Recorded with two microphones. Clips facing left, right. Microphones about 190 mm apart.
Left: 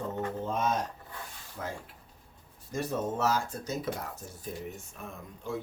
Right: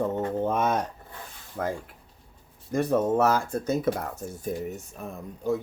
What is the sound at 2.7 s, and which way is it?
Speech, 60° right (ahead or behind).